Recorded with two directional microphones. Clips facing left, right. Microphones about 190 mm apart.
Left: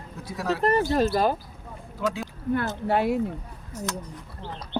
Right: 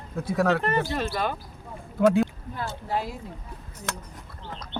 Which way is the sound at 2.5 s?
65° left (ahead or behind).